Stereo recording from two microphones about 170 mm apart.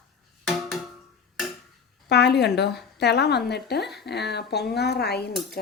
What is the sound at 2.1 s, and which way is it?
A woman's voice, 75° left (ahead or behind).